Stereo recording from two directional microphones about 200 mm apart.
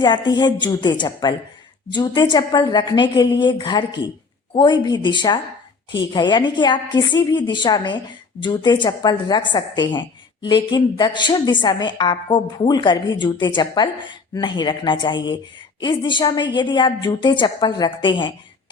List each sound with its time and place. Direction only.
0.0 s a woman's voice: 20° left (ahead or behind)